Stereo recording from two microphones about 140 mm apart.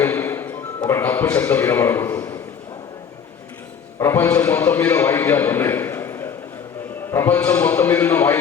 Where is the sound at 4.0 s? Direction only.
20° left (ahead or behind).